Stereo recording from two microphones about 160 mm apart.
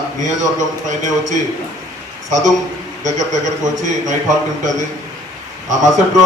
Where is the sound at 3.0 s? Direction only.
50° right (ahead or behind).